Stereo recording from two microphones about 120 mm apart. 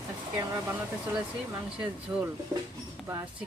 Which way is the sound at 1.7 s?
10° right (ahead or behind).